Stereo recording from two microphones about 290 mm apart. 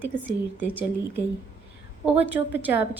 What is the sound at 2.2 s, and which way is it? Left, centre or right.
Speech, centre.